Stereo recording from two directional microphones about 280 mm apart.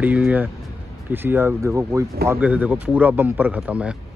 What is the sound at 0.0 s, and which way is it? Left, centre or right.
Speech, centre.